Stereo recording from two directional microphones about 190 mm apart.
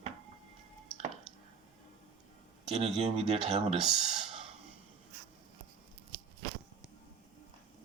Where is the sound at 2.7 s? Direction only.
30° right (ahead or behind).